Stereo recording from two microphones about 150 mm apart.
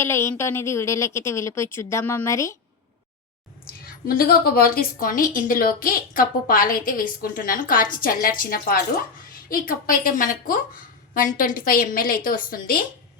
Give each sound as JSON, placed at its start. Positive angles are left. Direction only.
{"t": 0.0, "sound": "a woman's voice", "side_deg": 15}
{"t": 4.0, "sound": "speech", "side_deg": 85}